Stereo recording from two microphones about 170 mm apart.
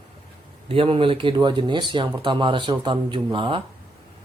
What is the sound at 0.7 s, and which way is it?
Speech, 35° right (ahead or behind).